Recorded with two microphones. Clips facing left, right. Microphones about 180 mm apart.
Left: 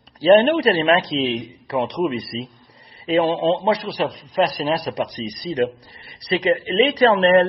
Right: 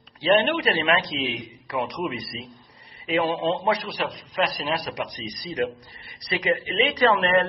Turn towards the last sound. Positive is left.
turn(degrees=30)  # may be behind; listen again after turning